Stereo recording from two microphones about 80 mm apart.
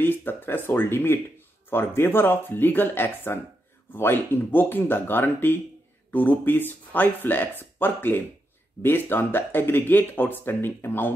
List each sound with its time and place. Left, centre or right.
0.0 s speech: left